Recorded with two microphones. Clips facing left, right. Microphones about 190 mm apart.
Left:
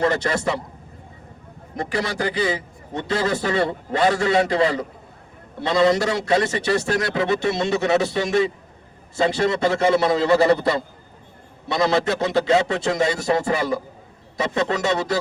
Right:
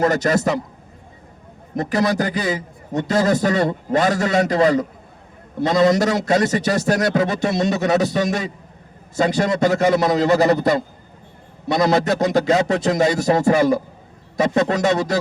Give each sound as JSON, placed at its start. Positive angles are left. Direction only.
{"t": 0.0, "sound": "a man's voice", "side_deg": -45}
{"t": 1.7, "sound": "a man's voice", "side_deg": -45}